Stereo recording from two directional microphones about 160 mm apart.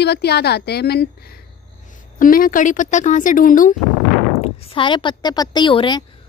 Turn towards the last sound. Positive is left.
turn(degrees=30)  # may be behind; listen again after turning